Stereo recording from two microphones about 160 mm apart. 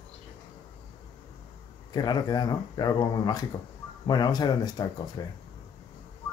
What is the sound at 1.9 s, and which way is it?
Speech, 25° left (ahead or behind).